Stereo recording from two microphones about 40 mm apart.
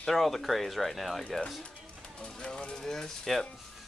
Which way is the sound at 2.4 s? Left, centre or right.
Left.